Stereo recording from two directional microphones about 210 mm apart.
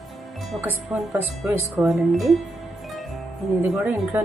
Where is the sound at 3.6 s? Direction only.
5° right (ahead or behind).